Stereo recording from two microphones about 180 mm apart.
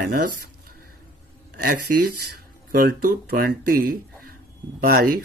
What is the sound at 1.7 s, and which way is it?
Speech, 60° right (ahead or behind).